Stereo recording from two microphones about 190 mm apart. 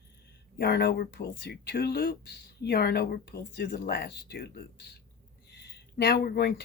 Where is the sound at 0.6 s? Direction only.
55° left (ahead or behind).